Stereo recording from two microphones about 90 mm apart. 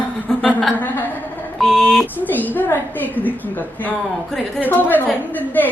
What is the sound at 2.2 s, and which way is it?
A woman's voice, 20° left (ahead or behind).